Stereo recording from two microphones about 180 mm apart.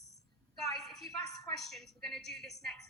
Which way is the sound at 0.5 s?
Centre (ahead or behind).